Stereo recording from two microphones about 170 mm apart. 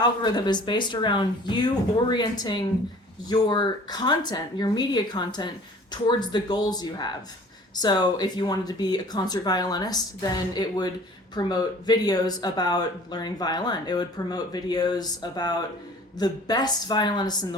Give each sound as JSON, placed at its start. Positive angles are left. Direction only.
{"t": 0.0, "sound": "speech", "side_deg": 25}